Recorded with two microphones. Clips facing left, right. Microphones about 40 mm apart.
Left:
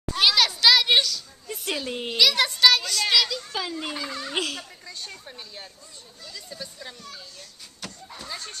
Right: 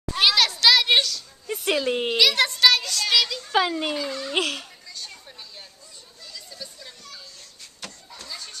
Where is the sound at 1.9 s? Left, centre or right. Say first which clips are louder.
Right 7 dB; right.